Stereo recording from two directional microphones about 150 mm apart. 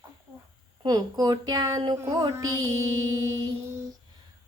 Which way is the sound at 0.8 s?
25° right (ahead or behind).